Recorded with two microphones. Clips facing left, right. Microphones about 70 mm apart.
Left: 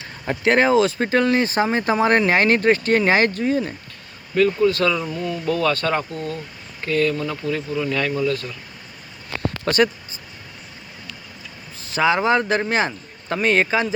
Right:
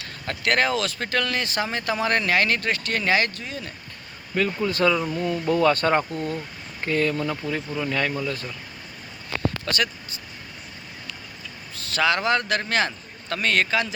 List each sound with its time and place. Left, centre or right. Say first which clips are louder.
0.0 s speech: left 6 dB; left
4.4 s speech: left 6 dB; centre
4.9 s speech: even; centre
5.3 s speech: right 1 dB; right
9.6 s speech: left 12 dB; left
11.9 s speech: left 4 dB; centre